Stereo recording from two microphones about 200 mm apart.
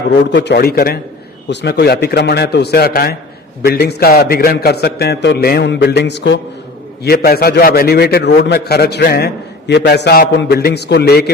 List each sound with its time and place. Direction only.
0.1 s a man's voice: 60° left (ahead or behind)
7.0 s a man's voice: 50° left (ahead or behind)